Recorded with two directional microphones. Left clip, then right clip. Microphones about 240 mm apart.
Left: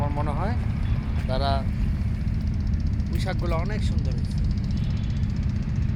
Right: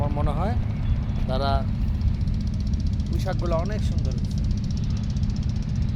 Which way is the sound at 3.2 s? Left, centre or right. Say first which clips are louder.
Right 3 dB; right.